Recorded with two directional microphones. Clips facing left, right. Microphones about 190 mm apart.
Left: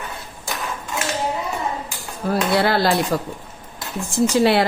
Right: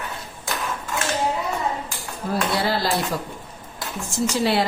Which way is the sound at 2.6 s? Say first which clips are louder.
Left 5 dB; 65° left (ahead or behind).